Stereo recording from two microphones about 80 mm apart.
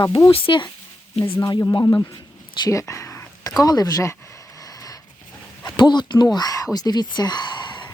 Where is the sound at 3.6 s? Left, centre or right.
Left.